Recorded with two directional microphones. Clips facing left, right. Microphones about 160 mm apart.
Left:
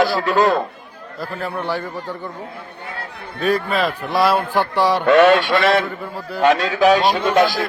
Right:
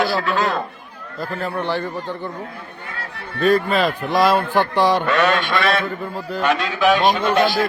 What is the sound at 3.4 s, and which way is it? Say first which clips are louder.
Speech: right 2 dB; 5° left (ahead or behind).